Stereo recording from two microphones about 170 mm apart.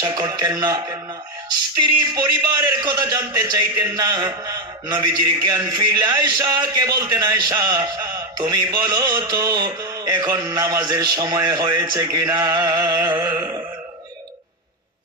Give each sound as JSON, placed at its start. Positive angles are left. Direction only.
{"t": 0.0, "sound": "a man's voice", "side_deg": -20}
{"t": 2.1, "sound": "a man's voice", "side_deg": -20}